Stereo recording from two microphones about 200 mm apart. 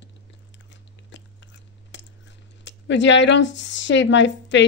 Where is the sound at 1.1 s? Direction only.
65° left (ahead or behind).